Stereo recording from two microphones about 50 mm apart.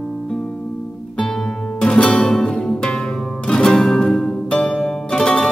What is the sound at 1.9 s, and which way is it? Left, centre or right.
Music, centre.